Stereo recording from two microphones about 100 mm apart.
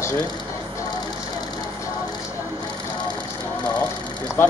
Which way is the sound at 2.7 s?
45° left (ahead or behind).